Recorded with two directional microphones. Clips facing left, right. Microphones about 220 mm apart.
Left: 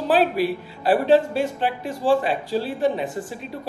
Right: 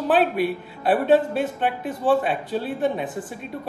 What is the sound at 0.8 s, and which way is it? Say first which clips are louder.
Speech: left 1 dB; centre (ahead or behind).